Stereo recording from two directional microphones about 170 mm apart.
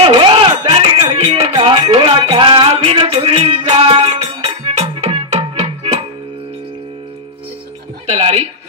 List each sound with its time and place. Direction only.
0.0 s music: 30° right (ahead or behind)
8.2 s chuckle: 40° right (ahead or behind)